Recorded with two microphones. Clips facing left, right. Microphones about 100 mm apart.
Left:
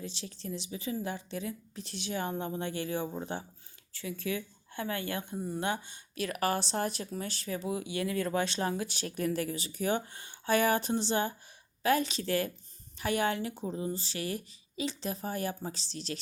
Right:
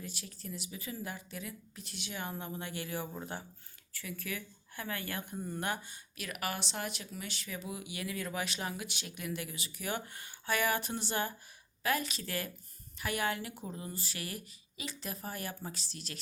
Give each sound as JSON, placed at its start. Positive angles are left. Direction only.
{"t": 0.0, "sound": "speech", "side_deg": 25}